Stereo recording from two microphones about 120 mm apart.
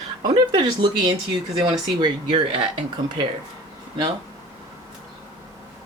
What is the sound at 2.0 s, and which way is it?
Speech, 45° right (ahead or behind).